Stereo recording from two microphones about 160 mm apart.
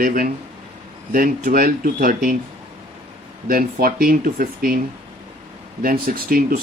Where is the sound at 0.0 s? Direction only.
60° right (ahead or behind).